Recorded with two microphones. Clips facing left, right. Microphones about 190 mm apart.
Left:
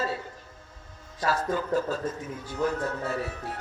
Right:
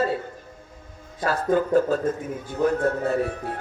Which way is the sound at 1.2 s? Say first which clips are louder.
Right 6 dB; 50° right (ahead or behind).